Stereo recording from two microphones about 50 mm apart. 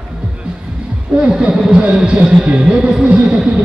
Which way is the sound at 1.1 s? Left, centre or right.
Centre.